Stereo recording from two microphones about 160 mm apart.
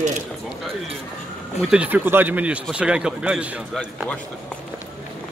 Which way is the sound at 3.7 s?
5° left (ahead or behind).